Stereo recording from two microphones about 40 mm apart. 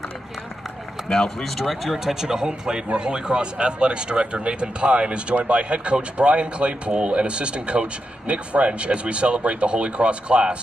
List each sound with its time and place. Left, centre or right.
1.1 s speech: centre
1.6 s speech: centre; by 10.6 s right